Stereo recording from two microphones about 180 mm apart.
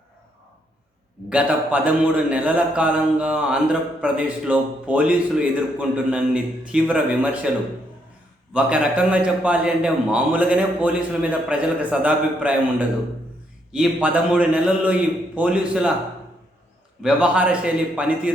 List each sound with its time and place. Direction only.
1.3 s a man's voice: 5° right (ahead or behind)
8.5 s a man's voice: 5° right (ahead or behind)
13.7 s a man's voice: 5° right (ahead or behind)
17.0 s a man's voice: 5° right (ahead or behind)